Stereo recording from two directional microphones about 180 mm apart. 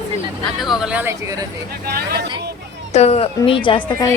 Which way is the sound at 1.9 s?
60° right (ahead or behind).